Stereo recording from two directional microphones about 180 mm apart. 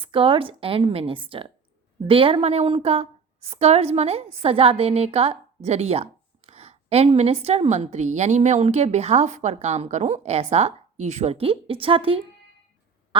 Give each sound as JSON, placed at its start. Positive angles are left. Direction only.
{"t": 0.0, "sound": "a woman's voice", "side_deg": -30}